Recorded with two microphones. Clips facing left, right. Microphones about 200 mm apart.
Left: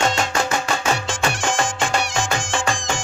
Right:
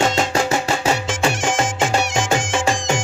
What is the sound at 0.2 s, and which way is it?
Music, 30° right (ahead or behind).